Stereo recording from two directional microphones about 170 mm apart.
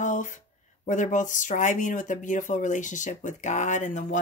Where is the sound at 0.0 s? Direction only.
45° left (ahead or behind).